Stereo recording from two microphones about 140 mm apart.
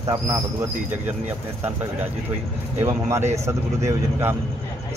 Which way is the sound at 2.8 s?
20° right (ahead or behind).